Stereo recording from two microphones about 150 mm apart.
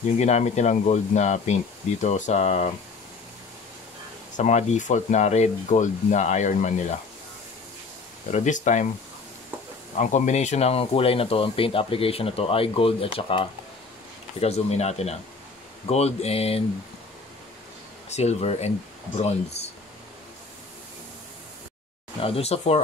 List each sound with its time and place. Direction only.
0.2 s speech: 50° left (ahead or behind)
4.4 s speech: 50° left (ahead or behind)
8.3 s speech: 55° left (ahead or behind)
9.9 s speech: 55° left (ahead or behind)
18.1 s speech: 45° left (ahead or behind)
22.2 s speech: 40° left (ahead or behind)